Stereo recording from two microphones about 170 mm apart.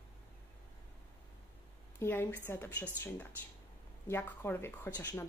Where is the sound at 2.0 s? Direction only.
15° left (ahead or behind).